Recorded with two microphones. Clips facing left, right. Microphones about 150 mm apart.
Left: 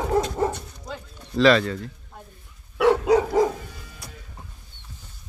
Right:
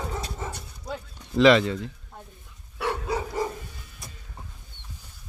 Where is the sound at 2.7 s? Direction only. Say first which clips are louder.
Left 11 dB; 90° left.